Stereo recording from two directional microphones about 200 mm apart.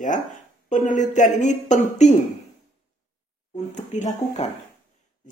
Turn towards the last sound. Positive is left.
turn(degrees=35)  # may be behind; listen again after turning